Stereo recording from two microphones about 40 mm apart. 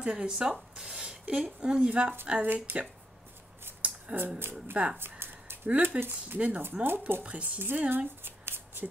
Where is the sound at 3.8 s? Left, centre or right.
Right.